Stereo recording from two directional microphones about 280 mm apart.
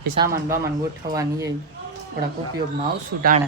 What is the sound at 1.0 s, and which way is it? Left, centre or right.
Speech, right.